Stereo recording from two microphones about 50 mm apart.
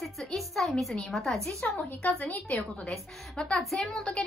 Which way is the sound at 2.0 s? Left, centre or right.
Left.